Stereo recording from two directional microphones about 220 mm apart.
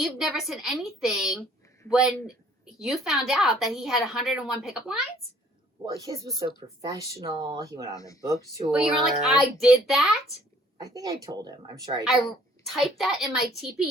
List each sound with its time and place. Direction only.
0.0 s a woman's voice: centre (ahead or behind)
5.8 s speech: 15° right (ahead or behind)
7.9 s speech: 15° left (ahead or behind)
8.3 s speech: 15° right (ahead or behind)
8.7 s a woman's voice: centre (ahead or behind)
10.9 s speech: 15° right (ahead or behind)
12.6 s a woman's voice: centre (ahead or behind)